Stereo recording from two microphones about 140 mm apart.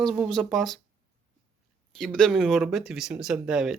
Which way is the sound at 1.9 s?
5° left (ahead or behind).